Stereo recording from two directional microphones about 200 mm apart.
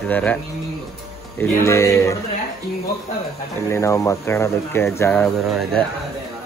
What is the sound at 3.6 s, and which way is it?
A man's voice, 15° left (ahead or behind).